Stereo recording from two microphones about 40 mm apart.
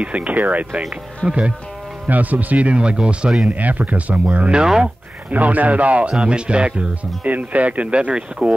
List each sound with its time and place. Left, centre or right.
0.0 s speech: right
1.2 s speech: centre
2.0 s speech: right
2.8 s speech: right
3.4 s speech: right
7.2 s speech: right